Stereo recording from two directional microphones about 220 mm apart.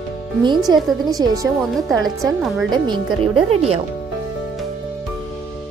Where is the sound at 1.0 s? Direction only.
15° right (ahead or behind).